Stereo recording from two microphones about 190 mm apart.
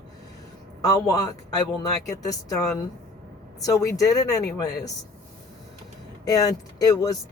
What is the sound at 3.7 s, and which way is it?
Speech, 15° left (ahead or behind).